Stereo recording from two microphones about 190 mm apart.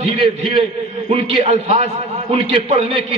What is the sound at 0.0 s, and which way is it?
A man's voice, 25° right (ahead or behind).